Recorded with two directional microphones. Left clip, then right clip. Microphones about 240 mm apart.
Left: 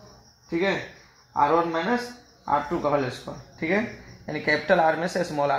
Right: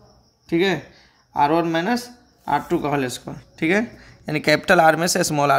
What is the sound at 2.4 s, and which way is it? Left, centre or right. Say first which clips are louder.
Speech: right 3 dB; right.